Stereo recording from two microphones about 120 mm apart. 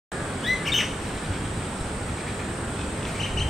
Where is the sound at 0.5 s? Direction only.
Centre (ahead or behind).